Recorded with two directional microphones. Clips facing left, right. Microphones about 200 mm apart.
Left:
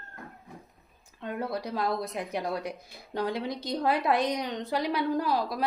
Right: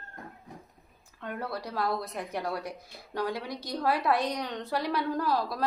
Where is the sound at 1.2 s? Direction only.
20° left (ahead or behind).